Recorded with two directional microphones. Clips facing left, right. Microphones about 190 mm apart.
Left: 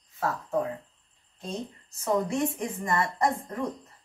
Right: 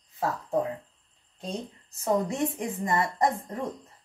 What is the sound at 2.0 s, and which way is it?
A woman's voice, 20° right (ahead or behind).